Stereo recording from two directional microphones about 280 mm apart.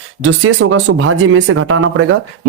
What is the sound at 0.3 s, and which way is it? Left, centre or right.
Speech, right.